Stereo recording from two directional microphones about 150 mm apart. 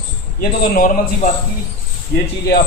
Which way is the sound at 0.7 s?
65° left (ahead or behind).